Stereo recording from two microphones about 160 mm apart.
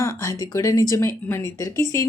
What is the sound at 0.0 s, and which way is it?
Speech, 20° left (ahead or behind).